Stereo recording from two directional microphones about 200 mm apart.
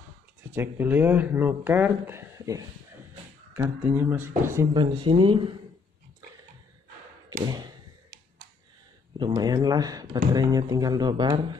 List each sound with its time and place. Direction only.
0.5 s speech: 10° right (ahead or behind)
4.7 s speech: 25° right (ahead or behind)
7.4 s speech: 20° right (ahead or behind)
9.2 s speech: 20° right (ahead or behind)